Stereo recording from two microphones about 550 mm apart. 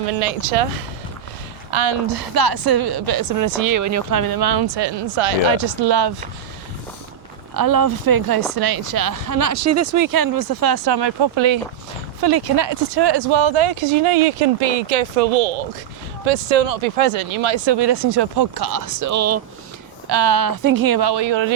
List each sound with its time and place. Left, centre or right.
0.1 s speech: right
1.7 s speech: right
2.3 s speech: right
5.8 s speech: right
7.5 s speech: right
17.0 s speech: right
20.1 s speech: right